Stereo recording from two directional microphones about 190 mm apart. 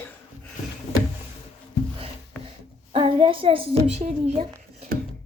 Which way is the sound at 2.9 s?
30° right (ahead or behind).